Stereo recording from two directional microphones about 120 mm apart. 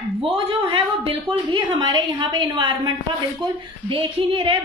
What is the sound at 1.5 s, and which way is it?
A woman's voice, 35° right (ahead or behind).